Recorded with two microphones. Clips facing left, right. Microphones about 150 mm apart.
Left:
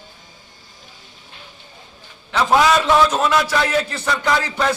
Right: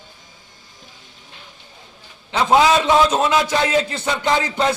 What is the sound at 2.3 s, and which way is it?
A man's voice, 20° right (ahead or behind).